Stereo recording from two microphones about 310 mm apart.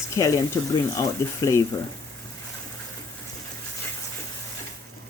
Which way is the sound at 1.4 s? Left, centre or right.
Centre.